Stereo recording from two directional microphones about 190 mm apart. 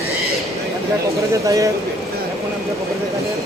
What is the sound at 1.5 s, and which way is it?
Speech, 15° right (ahead or behind).